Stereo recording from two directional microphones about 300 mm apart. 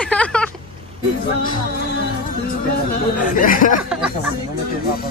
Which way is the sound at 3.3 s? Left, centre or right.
Left.